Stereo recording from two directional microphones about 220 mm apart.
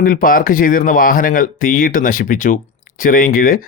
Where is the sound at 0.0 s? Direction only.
40° left (ahead or behind).